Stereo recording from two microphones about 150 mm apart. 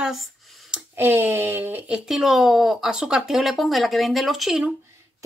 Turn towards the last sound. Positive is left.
turn(degrees=0)  # may be behind; listen again after turning